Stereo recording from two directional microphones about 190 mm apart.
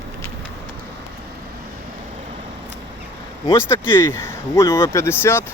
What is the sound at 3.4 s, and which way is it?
Speech, 15° left (ahead or behind).